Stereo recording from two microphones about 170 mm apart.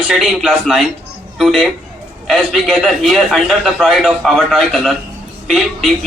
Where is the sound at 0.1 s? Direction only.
Centre (ahead or behind).